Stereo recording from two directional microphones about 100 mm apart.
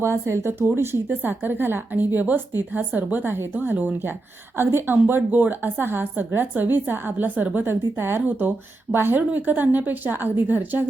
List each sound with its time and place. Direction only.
0.0 s a woman's voice: 25° right (ahead or behind)